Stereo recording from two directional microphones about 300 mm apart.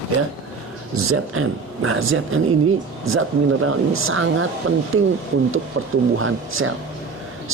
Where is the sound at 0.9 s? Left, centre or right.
Right.